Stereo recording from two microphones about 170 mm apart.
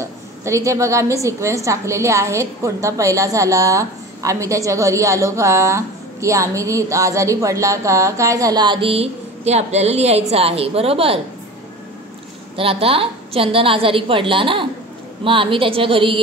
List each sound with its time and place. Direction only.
0.0 s a woman's voice: 15° right (ahead or behind); by 11.1 s 35° right (ahead or behind)
12.5 s a woman's voice: 35° right (ahead or behind)